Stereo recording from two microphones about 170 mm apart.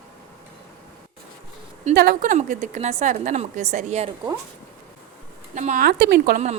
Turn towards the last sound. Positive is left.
turn(degrees=-70)  # may be behind; listen again after turning